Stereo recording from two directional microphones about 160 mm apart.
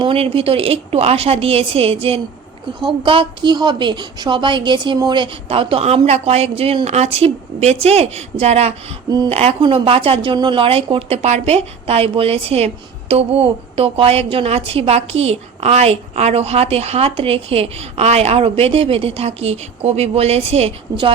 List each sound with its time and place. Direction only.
0.0 s speech: 35° right (ahead or behind)